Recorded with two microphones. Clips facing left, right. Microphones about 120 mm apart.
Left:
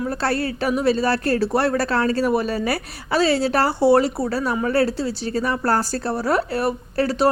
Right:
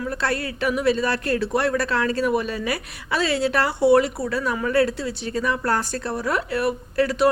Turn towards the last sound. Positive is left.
turn(degrees=30)  # may be behind; listen again after turning